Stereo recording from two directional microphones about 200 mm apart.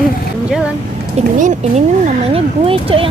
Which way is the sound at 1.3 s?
40° right (ahead or behind).